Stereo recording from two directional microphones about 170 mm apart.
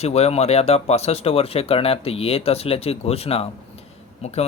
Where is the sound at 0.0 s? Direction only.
40° left (ahead or behind).